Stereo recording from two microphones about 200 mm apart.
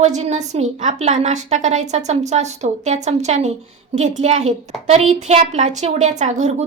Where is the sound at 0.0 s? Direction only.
35° right (ahead or behind).